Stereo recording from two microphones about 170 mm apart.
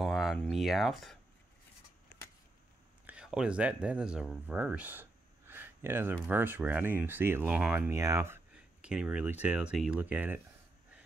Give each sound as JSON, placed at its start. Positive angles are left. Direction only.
{"t": 0.0, "sound": "speech", "side_deg": 0}
{"t": 3.1, "sound": "speech", "side_deg": -5}
{"t": 7.9, "sound": "speech", "side_deg": -20}
{"t": 8.5, "sound": "speech", "side_deg": -5}